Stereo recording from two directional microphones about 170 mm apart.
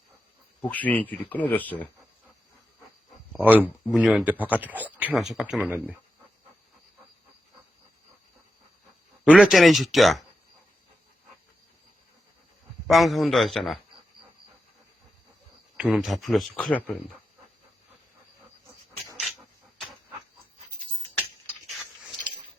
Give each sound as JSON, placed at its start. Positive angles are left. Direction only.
{"t": 0.6, "sound": "speech", "side_deg": 10}
{"t": 3.4, "sound": "speech", "side_deg": -10}
{"t": 9.2, "sound": "speech", "side_deg": -5}
{"t": 12.9, "sound": "speech", "side_deg": 0}
{"t": 15.8, "sound": "speech", "side_deg": -5}
{"t": 21.7, "sound": "a sound", "side_deg": 0}